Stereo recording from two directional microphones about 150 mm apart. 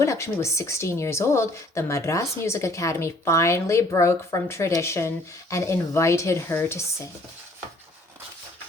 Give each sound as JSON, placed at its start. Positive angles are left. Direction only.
{"t": 0.0, "sound": "a woman's voice", "side_deg": 20}